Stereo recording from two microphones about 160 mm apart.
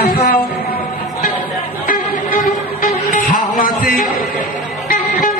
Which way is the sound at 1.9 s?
60° left (ahead or behind).